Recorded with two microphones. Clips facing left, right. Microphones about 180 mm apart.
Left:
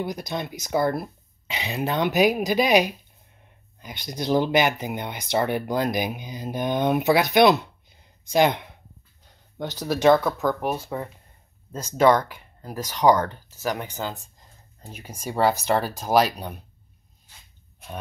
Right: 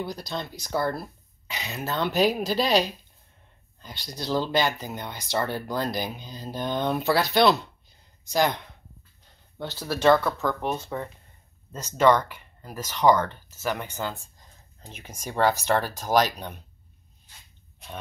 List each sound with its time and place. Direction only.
0.0 s speech: 15° left (ahead or behind)
4.0 s speech: 20° left (ahead or behind)